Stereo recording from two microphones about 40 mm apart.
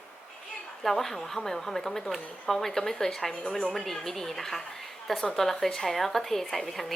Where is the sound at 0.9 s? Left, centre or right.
Centre.